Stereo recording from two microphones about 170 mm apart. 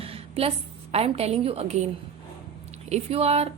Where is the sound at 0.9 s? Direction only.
35° right (ahead or behind).